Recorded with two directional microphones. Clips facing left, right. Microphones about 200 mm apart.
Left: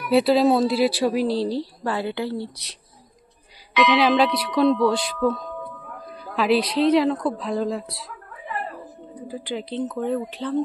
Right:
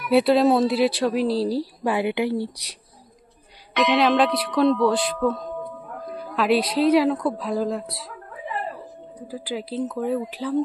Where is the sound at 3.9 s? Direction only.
Centre (ahead or behind).